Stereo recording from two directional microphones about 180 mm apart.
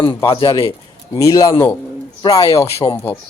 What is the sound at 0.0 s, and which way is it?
Speech, 30° left (ahead or behind).